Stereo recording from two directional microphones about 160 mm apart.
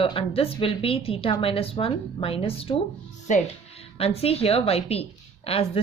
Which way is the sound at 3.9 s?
40° left (ahead or behind).